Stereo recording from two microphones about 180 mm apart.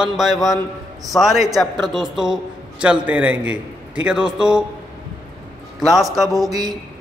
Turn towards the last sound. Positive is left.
turn(degrees=-20)  # may be behind; listen again after turning